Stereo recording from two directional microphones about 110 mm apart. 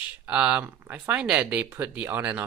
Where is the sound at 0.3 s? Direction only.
10° right (ahead or behind).